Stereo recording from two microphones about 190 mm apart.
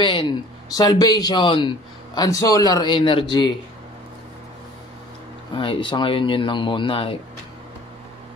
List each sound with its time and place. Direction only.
0.0 s a man's voice: 25° left (ahead or behind)
5.6 s a man's voice: 25° left (ahead or behind)